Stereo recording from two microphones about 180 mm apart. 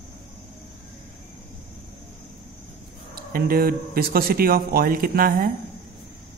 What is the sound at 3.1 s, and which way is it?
Speech, 55° right (ahead or behind).